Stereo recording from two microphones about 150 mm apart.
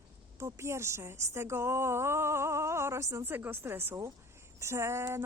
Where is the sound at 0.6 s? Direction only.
20° right (ahead or behind).